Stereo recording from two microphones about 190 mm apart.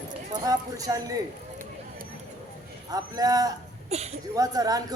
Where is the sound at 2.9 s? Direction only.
20° right (ahead or behind).